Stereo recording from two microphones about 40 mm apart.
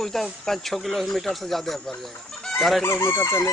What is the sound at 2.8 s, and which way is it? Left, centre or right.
Speech, left.